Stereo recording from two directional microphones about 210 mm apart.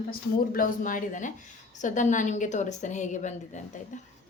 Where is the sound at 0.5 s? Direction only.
40° left (ahead or behind).